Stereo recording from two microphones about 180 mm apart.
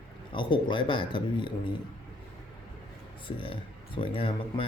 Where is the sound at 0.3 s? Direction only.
25° left (ahead or behind).